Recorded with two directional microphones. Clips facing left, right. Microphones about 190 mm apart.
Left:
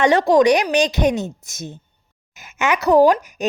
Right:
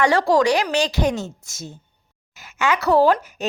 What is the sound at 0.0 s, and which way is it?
A woman's voice, 20° left (ahead or behind).